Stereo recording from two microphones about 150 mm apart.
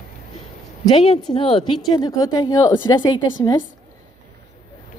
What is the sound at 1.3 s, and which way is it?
Speech, 35° left (ahead or behind).